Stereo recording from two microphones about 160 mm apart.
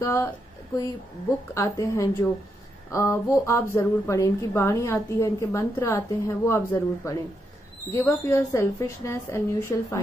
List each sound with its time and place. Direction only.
0.0 s a woman's voice: 20° left (ahead or behind)
1.5 s a woman's voice: 20° left (ahead or behind)